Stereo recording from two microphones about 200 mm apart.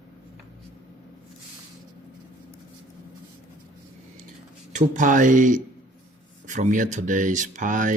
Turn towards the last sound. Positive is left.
turn(degrees=-40)  # may be behind; listen again after turning